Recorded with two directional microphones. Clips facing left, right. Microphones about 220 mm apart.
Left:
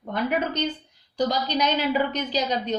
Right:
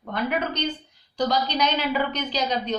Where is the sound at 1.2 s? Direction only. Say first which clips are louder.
Even; 45° left (ahead or behind).